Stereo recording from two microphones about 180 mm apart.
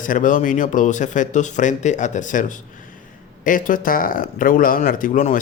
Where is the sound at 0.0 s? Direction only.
50° left (ahead or behind).